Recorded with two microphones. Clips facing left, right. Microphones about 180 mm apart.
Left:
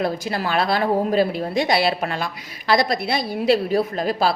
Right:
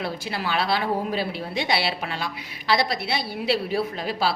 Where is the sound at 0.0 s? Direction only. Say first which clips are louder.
Left 6 dB; 45° left (ahead or behind).